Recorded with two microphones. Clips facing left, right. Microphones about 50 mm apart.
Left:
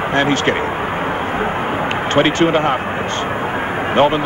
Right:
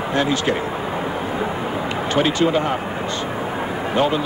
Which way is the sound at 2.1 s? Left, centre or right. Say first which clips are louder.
Left 4 dB; left.